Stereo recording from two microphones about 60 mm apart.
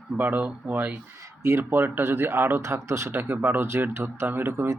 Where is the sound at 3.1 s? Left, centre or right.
Right.